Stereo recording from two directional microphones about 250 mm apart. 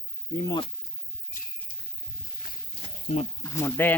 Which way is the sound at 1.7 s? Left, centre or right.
Left.